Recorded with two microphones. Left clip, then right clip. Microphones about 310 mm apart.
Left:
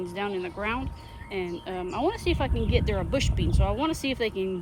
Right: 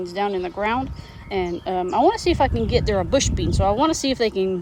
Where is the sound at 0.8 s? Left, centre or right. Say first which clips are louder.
Right 6 dB; right.